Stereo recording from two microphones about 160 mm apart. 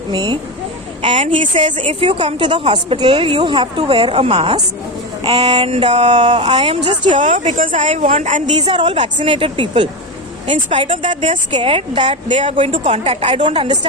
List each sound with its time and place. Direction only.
0.1 s speech: 25° right (ahead or behind)
1.5 s speech: 50° right (ahead or behind)
1.8 s a woman's voice: 35° right (ahead or behind)
7.1 s speech: 50° right (ahead or behind)
8.4 s a woman's voice: 30° right (ahead or behind)